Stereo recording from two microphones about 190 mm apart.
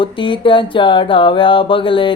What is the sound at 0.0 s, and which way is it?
Mantra, 25° left (ahead or behind).